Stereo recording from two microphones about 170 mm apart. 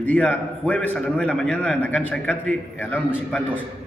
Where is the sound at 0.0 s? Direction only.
10° left (ahead or behind).